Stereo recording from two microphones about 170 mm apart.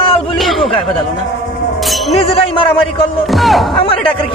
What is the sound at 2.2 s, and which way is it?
Speech, 35° left (ahead or behind).